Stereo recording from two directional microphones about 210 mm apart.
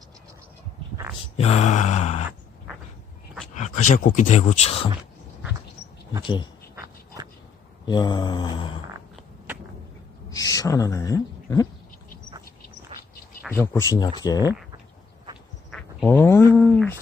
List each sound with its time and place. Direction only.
1.4 s a sound: 30° left (ahead or behind)
3.5 s speech: 35° left (ahead or behind)
6.2 s mantra: 20° left (ahead or behind)
7.9 s mantra: 20° left (ahead or behind)
10.2 s speech: 15° left (ahead or behind)
13.5 s speech: 10° left (ahead or behind)
15.7 s a sound: 5° left (ahead or behind)